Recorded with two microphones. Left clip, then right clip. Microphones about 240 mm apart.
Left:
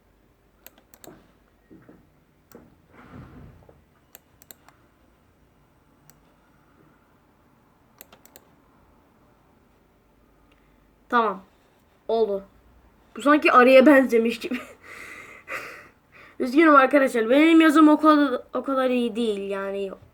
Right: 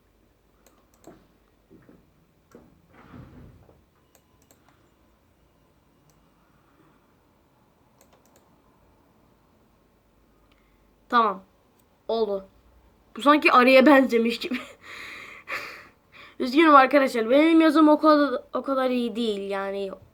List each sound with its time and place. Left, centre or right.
4.1 s computer keyboard: left
7.9 s typing: left
11.1 s speech: centre